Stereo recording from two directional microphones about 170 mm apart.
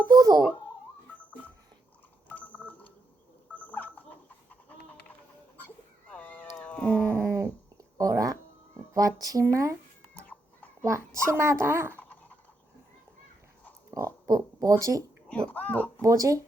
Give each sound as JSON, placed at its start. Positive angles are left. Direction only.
{"t": 0.1, "sound": "speech", "side_deg": -20}
{"t": 2.3, "sound": "telephone dialing", "side_deg": 10}
{"t": 3.5, "sound": "fowl", "side_deg": 10}
{"t": 5.6, "sound": "cat", "side_deg": 10}
{"t": 7.9, "sound": "a sound", "side_deg": -20}
{"t": 8.9, "sound": "speech", "side_deg": -20}
{"t": 10.8, "sound": "a child's voice", "side_deg": -15}
{"t": 13.9, "sound": "speech", "side_deg": -20}
{"t": 15.3, "sound": "a child's voice", "side_deg": 10}
{"t": 16.0, "sound": "speech", "side_deg": -20}